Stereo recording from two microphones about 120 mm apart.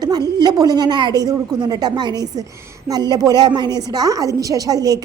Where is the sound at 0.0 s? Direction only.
35° right (ahead or behind).